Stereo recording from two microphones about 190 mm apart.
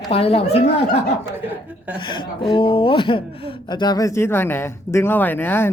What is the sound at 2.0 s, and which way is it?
Speech, 25° left (ahead or behind).